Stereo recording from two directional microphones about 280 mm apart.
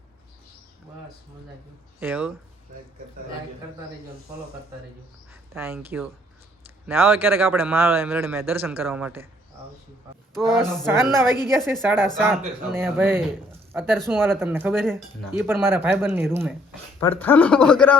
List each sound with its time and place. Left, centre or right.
2.0 s speech: centre
5.5 s speech: centre
10.3 s speech: centre
17.0 s speech: centre